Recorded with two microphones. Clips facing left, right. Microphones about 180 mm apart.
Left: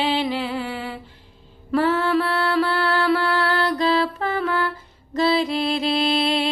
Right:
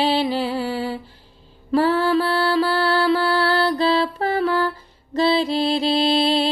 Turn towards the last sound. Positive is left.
turn(degrees=-30)  # may be behind; listen again after turning